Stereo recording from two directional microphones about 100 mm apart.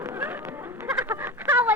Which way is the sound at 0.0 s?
20° right (ahead or behind).